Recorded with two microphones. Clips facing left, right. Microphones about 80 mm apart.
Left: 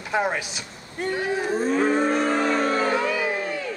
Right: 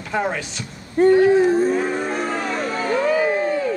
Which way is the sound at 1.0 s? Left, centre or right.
Right.